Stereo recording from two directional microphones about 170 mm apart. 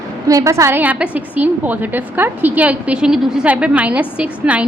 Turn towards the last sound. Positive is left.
turn(degrees=-10)  # may be behind; listen again after turning